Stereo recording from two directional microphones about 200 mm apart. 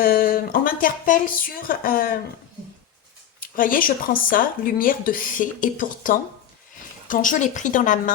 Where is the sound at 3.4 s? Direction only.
45° left (ahead or behind).